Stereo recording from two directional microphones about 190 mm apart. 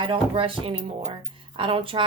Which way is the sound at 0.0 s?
25° right (ahead or behind).